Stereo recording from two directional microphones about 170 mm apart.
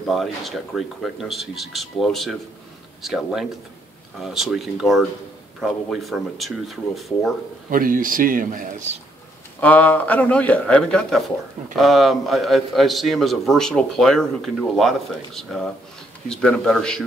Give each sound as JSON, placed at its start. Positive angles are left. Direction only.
{"t": 0.1, "sound": "a man's voice", "side_deg": 0}
{"t": 7.7, "sound": "a man's voice", "side_deg": -55}
{"t": 9.6, "sound": "a man's voice", "side_deg": 10}